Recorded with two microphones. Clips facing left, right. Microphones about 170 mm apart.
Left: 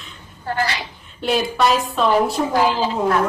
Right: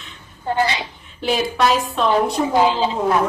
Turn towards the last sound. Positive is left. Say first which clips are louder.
# even
turn(degrees=0)  # may be behind; listen again after turning